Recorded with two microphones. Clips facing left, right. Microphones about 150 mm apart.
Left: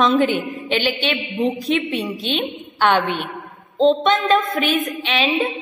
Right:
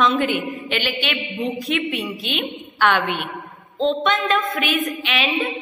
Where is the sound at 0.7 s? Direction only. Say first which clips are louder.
Left 6 dB; 30° left (ahead or behind).